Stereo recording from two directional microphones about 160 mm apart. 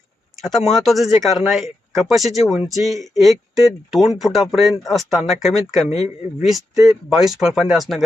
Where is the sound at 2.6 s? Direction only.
20° right (ahead or behind).